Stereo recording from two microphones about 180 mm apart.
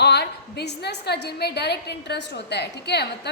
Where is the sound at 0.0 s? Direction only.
65° left (ahead or behind).